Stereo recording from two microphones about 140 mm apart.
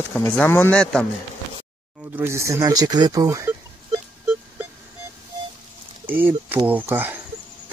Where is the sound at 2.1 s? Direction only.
15° right (ahead or behind).